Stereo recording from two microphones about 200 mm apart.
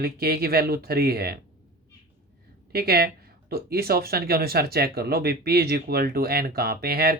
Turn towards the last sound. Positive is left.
turn(degrees=-50)  # may be behind; listen again after turning